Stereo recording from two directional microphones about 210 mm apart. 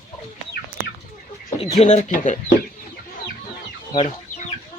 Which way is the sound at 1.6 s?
35° left (ahead or behind).